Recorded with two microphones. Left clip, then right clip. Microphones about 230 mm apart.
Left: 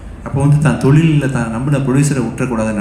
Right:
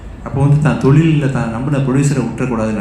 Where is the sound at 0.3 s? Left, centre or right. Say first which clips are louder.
Even; left.